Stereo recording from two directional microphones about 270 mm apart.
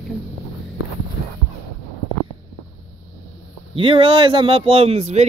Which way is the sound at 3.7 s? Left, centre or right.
Centre.